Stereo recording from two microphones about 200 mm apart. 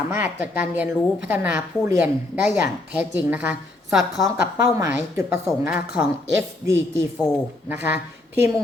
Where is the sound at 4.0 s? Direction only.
Centre (ahead or behind).